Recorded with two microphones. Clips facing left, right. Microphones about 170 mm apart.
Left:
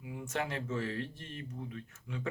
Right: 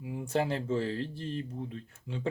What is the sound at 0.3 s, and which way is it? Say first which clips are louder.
Speech: right 7 dB; 30° right (ahead or behind).